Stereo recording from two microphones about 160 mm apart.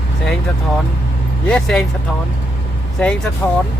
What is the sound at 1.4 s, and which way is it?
Speech, 5° left (ahead or behind).